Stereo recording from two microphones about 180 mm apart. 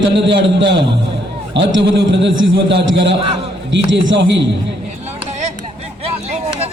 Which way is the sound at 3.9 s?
80° right.